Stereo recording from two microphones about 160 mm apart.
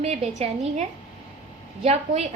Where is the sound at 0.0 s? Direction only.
45° right (ahead or behind).